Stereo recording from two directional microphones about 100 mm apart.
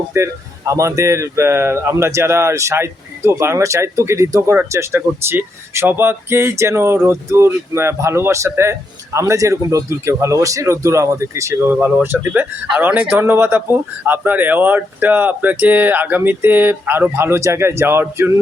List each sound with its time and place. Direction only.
0.1 s speech: 30° right (ahead or behind)